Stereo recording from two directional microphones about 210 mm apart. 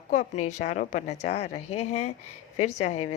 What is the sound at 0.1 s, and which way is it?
A woman's voice, 35° left (ahead or behind).